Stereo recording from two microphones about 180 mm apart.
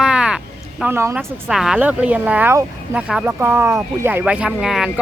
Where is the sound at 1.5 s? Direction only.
Centre (ahead or behind).